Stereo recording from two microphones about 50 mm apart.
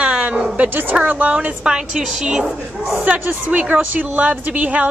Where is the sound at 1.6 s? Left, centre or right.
Centre.